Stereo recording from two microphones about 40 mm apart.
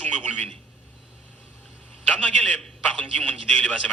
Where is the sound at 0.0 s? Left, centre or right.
Left.